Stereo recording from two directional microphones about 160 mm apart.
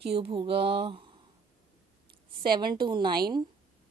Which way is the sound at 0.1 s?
35° right (ahead or behind).